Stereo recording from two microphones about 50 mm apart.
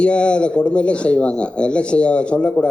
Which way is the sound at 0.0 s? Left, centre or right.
Left.